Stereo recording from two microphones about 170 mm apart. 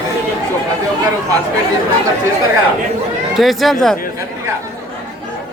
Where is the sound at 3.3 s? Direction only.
Centre (ahead or behind).